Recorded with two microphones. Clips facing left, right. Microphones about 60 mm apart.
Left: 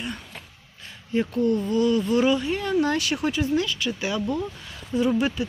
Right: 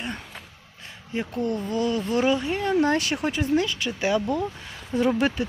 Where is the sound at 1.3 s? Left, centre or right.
Right.